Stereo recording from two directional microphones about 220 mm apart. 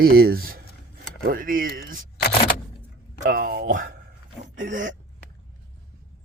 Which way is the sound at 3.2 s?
45° right (ahead or behind).